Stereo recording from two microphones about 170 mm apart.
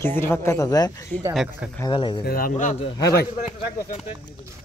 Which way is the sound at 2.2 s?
60° left (ahead or behind).